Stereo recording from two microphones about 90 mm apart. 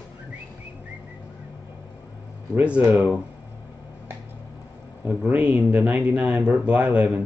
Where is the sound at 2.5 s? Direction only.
15° right (ahead or behind).